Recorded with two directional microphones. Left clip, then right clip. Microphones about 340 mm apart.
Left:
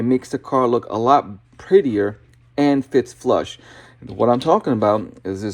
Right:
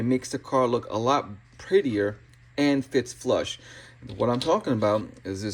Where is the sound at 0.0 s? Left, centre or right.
Centre.